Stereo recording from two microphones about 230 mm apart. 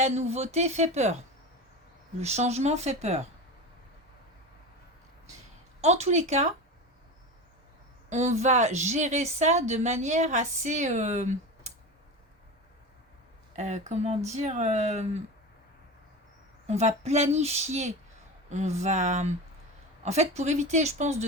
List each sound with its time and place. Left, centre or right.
0.0 s speech: right
2.2 s speech: right
5.8 s speech: right
8.1 s a woman's voice: right
13.6 s speech: right
16.6 s a woman's voice: right